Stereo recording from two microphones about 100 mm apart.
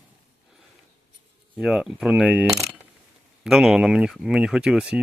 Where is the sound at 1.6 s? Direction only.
5° right (ahead or behind).